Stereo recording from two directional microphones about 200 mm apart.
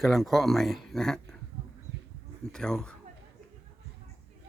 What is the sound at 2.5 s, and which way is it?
Speech, 5° left (ahead or behind).